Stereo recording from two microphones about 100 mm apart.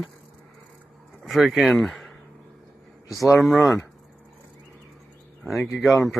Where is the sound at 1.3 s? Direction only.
Centre (ahead or behind).